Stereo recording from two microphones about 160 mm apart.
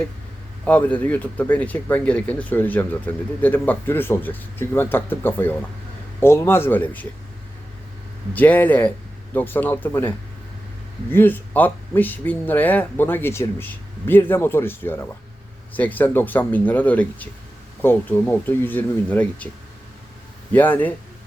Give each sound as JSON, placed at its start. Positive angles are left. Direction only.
{"t": 0.6, "sound": "speech", "side_deg": 10}
{"t": 8.3, "sound": "speech", "side_deg": 10}
{"t": 11.1, "sound": "speech", "side_deg": 10}
{"t": 20.5, "sound": "speech", "side_deg": 10}